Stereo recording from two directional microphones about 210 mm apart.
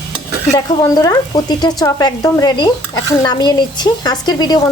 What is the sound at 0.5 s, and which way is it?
Speech, 20° left (ahead or behind).